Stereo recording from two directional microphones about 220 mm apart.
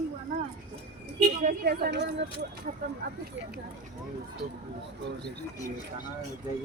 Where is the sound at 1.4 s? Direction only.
45° right (ahead or behind).